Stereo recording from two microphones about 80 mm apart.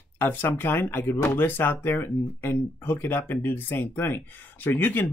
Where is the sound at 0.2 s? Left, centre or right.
Left.